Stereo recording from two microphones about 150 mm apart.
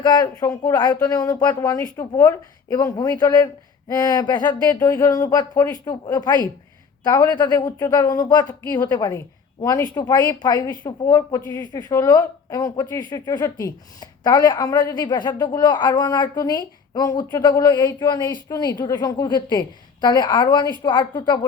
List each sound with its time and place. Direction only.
0.0 s a woman's voice: 30° left (ahead or behind)